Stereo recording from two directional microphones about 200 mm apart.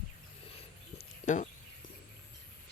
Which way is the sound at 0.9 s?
40° left (ahead or behind).